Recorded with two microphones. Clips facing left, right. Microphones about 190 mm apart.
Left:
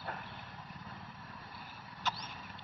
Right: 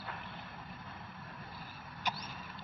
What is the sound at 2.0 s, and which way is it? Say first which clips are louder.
Vehicle: even; 15° right (ahead or behind).